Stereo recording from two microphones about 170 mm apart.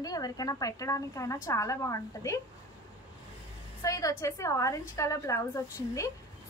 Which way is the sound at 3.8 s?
20° left (ahead or behind).